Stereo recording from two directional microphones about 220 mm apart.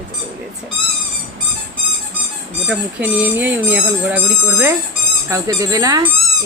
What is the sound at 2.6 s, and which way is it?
Speech, 5° right (ahead or behind).